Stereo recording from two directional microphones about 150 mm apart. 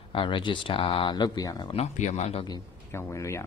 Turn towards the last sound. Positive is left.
turn(degrees=20)  # may be behind; listen again after turning